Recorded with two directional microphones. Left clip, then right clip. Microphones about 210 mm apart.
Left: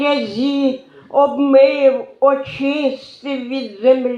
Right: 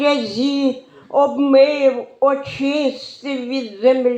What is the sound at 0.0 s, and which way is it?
Speech, 25° right (ahead or behind).